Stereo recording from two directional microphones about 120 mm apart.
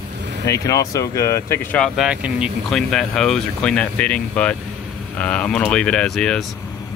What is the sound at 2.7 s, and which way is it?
Speech, 5° left (ahead or behind).